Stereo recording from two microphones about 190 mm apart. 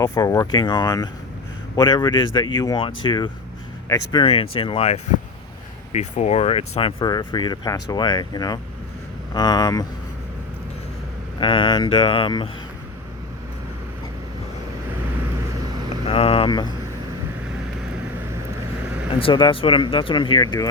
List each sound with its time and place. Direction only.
0.0 s speech: 20° left (ahead or behind)
11.3 s speech: 25° left (ahead or behind)
16.0 s speech: 30° left (ahead or behind)
19.2 s speech: 25° left (ahead or behind)